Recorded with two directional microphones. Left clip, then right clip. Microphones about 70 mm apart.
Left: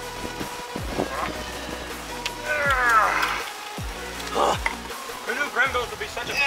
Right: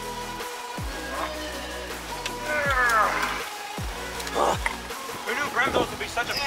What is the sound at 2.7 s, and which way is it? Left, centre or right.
Music, centre.